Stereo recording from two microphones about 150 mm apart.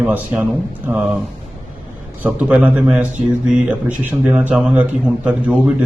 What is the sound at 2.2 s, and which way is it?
Mantra, 10° right (ahead or behind).